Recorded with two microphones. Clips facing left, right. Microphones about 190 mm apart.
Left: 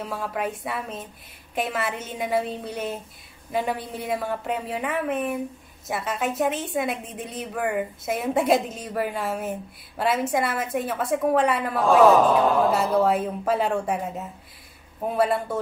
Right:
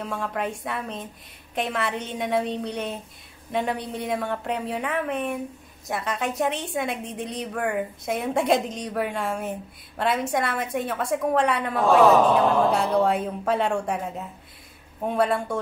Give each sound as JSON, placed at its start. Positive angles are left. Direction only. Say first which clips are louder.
{"t": 0.0, "sound": "a woman's voice", "louder": "even", "side_deg": 5}